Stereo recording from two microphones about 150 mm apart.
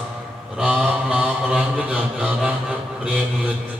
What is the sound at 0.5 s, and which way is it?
Mantra, 10° right (ahead or behind).